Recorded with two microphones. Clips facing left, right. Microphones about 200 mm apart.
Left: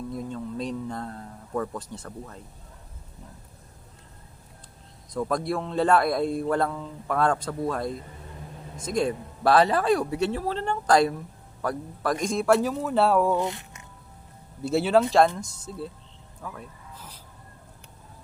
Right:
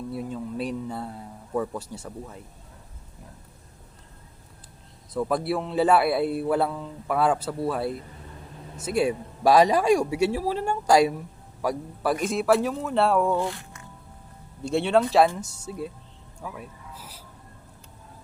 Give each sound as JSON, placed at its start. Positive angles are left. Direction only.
{"t": 0.1, "sound": "a sound", "side_deg": -10}
{"t": 5.1, "sound": "a man's voice", "side_deg": -5}
{"t": 13.3, "sound": "speech", "side_deg": 20}
{"t": 14.6, "sound": "speech", "side_deg": 5}
{"t": 15.4, "sound": "a man's voice", "side_deg": -10}
{"t": 16.4, "sound": "music", "side_deg": -10}